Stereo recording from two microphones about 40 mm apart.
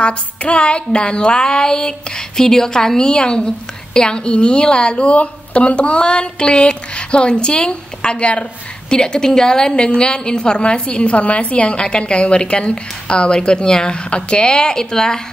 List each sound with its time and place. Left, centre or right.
0.0 s a woman's voice: left